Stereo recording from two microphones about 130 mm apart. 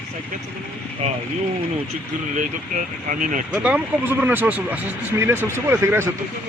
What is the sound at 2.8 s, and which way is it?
Speech, 90° right.